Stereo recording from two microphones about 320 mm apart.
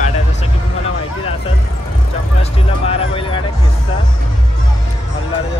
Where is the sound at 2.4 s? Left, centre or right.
Centre.